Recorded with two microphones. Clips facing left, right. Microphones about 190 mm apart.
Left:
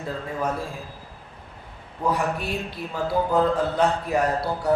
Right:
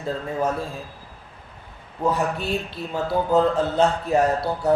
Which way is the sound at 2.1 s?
25° right (ahead or behind).